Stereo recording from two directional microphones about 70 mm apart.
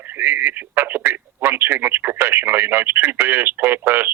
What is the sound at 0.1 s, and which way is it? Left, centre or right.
Speech, right.